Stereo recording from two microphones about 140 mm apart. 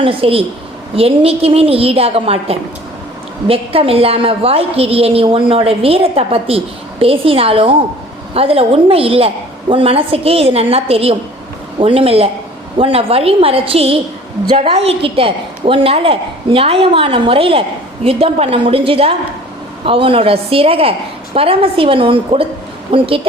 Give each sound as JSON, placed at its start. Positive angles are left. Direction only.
{"t": 0.0, "sound": "a woman's voice", "side_deg": -40}